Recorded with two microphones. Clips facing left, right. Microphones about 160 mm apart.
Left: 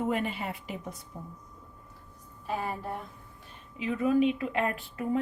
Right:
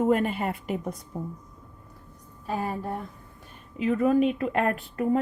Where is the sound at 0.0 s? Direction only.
45° right (ahead or behind).